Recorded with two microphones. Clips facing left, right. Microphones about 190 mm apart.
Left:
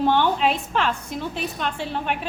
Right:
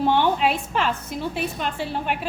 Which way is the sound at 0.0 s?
10° right (ahead or behind).